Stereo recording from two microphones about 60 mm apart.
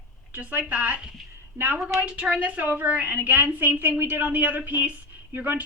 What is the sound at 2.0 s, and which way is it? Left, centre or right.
A woman's voice, centre.